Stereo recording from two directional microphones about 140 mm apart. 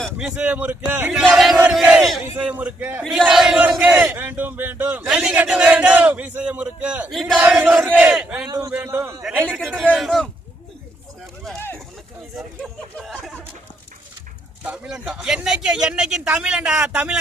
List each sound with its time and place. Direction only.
0.0 s a man's voice: 5° right (ahead or behind)
1.8 s battle cry: 10° right (ahead or behind)
2.3 s a man's voice: 10° right (ahead or behind)
7.6 s speech: 10° right (ahead or behind)
8.4 s a man's voice: 25° right (ahead or behind); by 9.6 s 10° right (ahead or behind)
9.6 s a man's voice: 5° left (ahead or behind)
12.4 s a man's voice: centre (ahead or behind)
14.6 s a man's voice: 5° right (ahead or behind)